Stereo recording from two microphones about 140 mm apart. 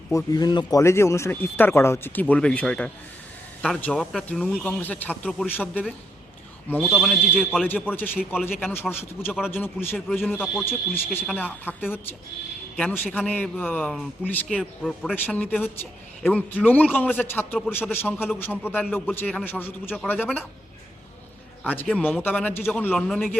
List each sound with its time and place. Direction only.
0.1 s speech: 25° left (ahead or behind); by 2.9 s 10° left (ahead or behind)
3.9 s a man's voice: centre (ahead or behind)
6.8 s speech: centre (ahead or behind)
7.9 s a man's voice: 15° left (ahead or behind)
8.2 s speech: 5° right (ahead or behind)
8.6 s a man's voice: 15° left (ahead or behind)
21.6 s a man's voice: 10° left (ahead or behind)
23.0 s speech: centre (ahead or behind)